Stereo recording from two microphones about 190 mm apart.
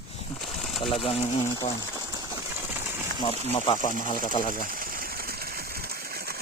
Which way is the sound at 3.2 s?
30° left (ahead or behind).